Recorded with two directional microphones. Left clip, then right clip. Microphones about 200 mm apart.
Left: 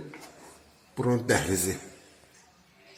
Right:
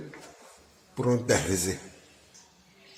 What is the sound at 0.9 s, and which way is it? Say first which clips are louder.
Speech: even; 5° right (ahead or behind).